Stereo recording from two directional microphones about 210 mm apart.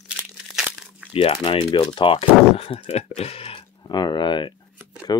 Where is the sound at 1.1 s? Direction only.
25° left (ahead or behind).